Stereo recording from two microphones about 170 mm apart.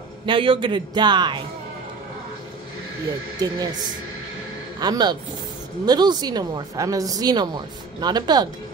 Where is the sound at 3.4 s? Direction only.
25° right (ahead or behind).